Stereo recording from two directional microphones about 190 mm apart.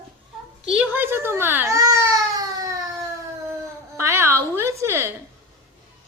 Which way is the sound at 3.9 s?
15° right (ahead or behind).